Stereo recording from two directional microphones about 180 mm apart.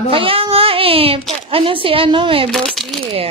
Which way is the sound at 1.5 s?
30° right (ahead or behind).